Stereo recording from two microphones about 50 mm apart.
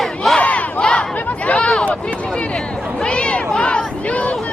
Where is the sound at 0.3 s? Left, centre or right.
Left.